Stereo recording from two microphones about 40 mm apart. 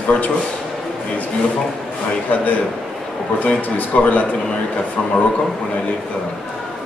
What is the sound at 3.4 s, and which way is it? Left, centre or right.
Speech, left.